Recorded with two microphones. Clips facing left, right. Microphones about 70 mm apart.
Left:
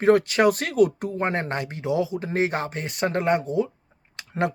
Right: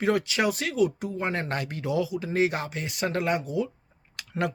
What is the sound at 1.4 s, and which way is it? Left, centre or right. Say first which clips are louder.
Speech: left 3 dB; left.